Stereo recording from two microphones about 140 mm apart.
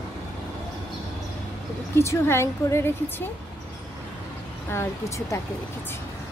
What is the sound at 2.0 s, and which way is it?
Speech, 20° left (ahead or behind).